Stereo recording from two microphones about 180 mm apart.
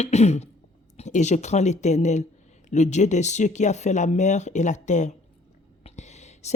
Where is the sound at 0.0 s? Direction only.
35° left (ahead or behind).